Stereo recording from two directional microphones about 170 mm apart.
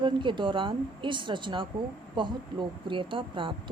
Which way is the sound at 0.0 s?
30° right (ahead or behind).